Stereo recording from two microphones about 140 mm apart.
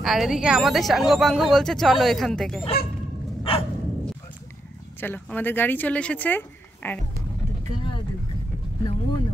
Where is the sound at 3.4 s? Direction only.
40° left (ahead or behind).